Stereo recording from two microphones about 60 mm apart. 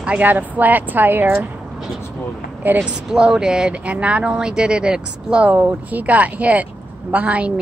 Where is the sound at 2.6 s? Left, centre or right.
Right.